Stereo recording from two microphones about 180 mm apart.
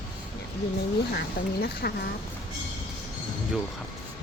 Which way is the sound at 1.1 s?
60° left (ahead or behind).